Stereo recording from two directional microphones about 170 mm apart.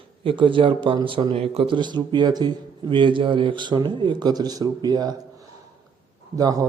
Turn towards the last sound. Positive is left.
turn(degrees=-20)  # may be behind; listen again after turning